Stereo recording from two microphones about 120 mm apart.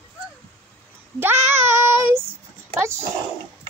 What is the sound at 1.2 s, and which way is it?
Child singing, 20° right (ahead or behind).